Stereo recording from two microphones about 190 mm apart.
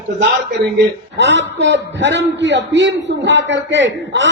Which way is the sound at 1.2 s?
70° right (ahead or behind).